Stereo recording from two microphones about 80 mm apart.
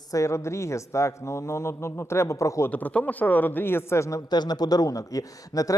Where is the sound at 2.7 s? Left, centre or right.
Centre; by 4.2 s left.